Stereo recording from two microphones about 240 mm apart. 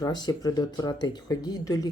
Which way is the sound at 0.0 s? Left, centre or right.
Centre.